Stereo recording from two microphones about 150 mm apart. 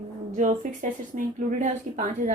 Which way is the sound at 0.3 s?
60° right (ahead or behind).